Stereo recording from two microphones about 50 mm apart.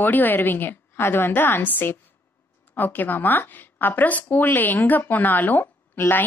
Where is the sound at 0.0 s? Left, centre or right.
Left.